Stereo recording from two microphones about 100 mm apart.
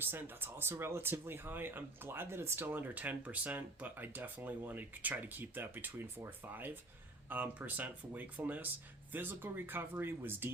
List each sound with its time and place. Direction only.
0.0 s speech: 20° right (ahead or behind)